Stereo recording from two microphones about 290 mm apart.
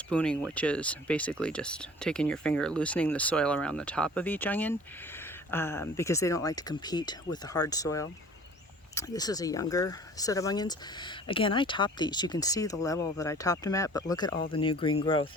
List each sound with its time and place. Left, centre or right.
0.1 s speech: centre